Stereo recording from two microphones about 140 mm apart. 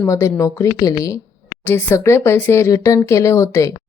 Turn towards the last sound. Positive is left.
turn(degrees=20)  # may be behind; listen again after turning